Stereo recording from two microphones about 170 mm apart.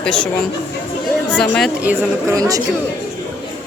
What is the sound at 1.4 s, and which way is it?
Speech, 5° left (ahead or behind).